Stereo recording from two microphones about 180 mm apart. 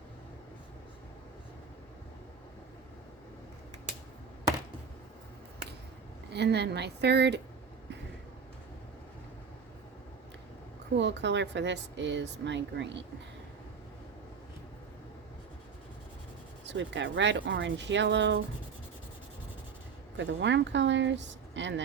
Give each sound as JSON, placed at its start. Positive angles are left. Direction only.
{"t": 6.3, "sound": "speech", "side_deg": -70}
{"t": 10.9, "sound": "speech", "side_deg": -75}
{"t": 16.6, "sound": "speech", "side_deg": -85}
{"t": 20.1, "sound": "speech", "side_deg": -85}